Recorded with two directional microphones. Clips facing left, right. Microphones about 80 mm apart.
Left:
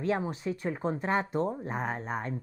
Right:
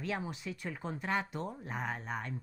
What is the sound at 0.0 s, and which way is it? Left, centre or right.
A woman's voice, left.